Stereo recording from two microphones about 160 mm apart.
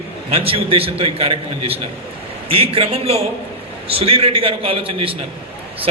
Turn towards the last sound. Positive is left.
turn(degrees=-35)  # may be behind; listen again after turning